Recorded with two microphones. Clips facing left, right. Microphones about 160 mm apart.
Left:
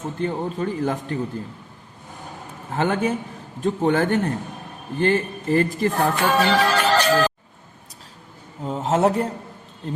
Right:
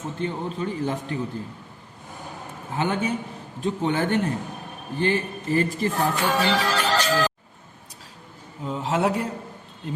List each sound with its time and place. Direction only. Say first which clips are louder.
0.2 s a man's voice: left 4 dB; 50° left (ahead or behind)
2.7 s a man's voice: left 3 dB; 50° left (ahead or behind)
8.6 s a man's voice: left 4 dB; 45° left (ahead or behind)